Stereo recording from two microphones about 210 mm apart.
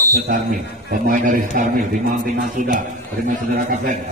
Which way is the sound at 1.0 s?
40° right (ahead or behind).